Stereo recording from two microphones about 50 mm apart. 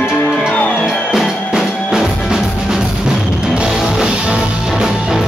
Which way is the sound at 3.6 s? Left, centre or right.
Centre.